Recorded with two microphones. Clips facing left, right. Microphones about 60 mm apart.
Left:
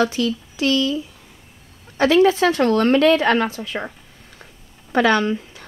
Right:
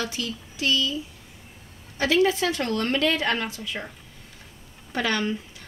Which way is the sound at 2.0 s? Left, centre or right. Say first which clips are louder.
Left 7 dB; left.